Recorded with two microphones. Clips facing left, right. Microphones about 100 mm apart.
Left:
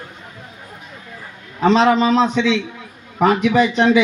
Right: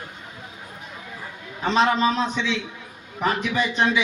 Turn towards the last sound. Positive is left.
turn(degrees=90)